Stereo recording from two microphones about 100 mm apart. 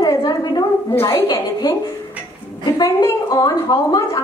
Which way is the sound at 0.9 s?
20° left (ahead or behind).